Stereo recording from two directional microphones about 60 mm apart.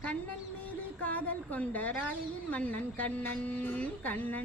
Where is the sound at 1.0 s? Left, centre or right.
Left.